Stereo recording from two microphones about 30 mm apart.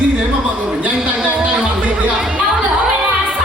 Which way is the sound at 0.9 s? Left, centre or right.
Right.